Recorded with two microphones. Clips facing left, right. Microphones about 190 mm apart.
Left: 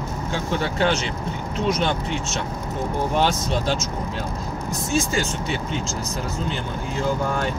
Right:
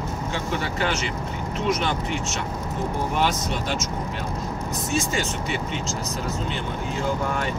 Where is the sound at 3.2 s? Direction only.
30° left (ahead or behind).